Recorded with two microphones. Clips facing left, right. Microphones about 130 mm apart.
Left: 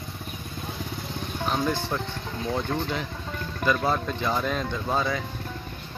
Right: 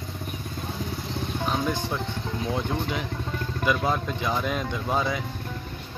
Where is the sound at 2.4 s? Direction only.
5° right (ahead or behind).